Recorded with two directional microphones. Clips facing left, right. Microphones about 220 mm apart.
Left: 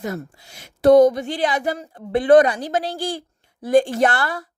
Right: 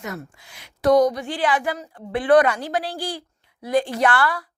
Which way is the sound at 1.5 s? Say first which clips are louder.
Even; 40° left (ahead or behind).